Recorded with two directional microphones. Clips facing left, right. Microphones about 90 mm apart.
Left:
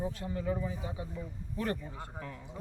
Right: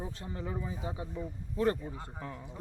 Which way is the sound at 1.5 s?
25° right (ahead or behind).